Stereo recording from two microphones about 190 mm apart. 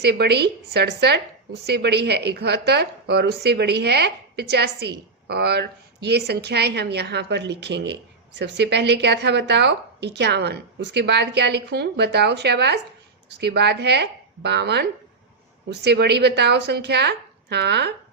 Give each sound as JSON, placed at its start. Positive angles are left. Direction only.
{"t": 0.0, "sound": "a woman's voice", "side_deg": -60}